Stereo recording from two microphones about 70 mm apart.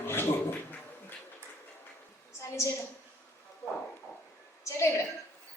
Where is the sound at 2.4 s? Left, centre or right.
Left.